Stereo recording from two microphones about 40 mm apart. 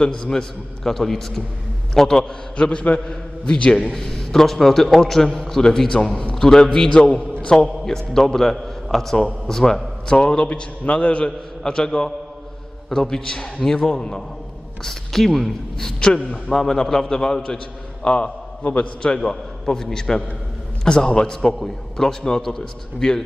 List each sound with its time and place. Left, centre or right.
0.0 s a man's voice: centre
2.5 s a man's voice: left
3.9 s a man's voice: centre
7.8 s a man's voice: centre
14.8 s a man's voice: centre
17.2 s a man's voice: left
19.1 s a man's voice: centre